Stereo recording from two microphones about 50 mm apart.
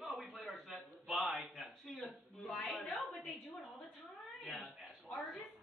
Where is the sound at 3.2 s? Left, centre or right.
Left.